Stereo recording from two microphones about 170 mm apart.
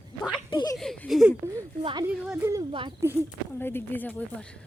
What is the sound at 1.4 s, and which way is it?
Speech, 20° right (ahead or behind).